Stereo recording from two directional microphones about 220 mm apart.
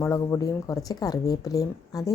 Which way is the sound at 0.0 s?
15° left (ahead or behind).